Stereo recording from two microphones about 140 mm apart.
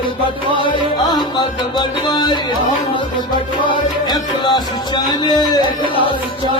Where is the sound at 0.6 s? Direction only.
35° left (ahead or behind).